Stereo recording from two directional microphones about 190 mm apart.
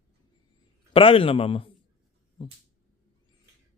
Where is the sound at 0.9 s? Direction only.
30° left (ahead or behind).